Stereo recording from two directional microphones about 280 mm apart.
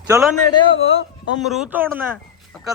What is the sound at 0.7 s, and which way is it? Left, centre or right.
Speech, left.